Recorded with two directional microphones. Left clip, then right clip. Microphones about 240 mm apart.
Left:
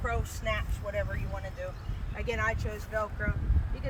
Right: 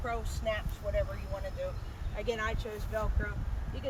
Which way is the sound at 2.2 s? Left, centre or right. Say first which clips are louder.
Left 3 dB; centre.